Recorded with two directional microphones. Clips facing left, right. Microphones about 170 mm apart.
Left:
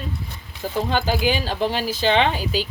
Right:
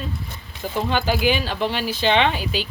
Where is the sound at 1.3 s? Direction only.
40° left (ahead or behind).